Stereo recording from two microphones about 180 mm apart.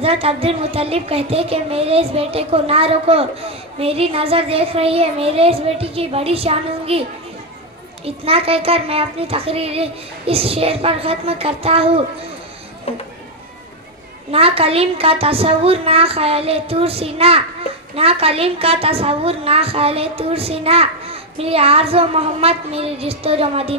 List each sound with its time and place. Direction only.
0.0 s a woman's voice: 35° right (ahead or behind)
12.9 s speech: 35° left (ahead or behind)
14.3 s a woman's voice: 35° right (ahead or behind)